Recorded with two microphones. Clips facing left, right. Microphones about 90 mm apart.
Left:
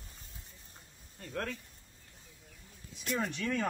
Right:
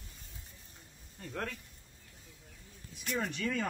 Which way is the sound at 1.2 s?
Centre (ahead or behind).